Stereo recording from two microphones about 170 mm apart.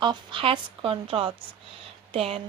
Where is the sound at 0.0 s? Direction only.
25° right (ahead or behind).